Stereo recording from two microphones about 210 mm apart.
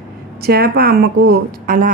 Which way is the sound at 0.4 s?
50° right (ahead or behind).